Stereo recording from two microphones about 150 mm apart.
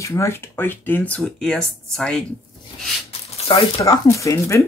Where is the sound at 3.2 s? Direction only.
40° left (ahead or behind).